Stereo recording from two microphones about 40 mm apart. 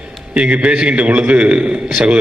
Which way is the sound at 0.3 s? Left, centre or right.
Right.